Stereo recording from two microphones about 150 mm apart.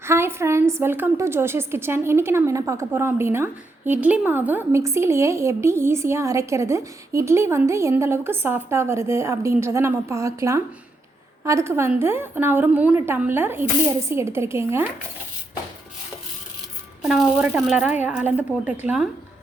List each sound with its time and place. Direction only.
0.0 s a woman's voice: 15° right (ahead or behind)
17.0 s a woman's voice: 5° right (ahead or behind)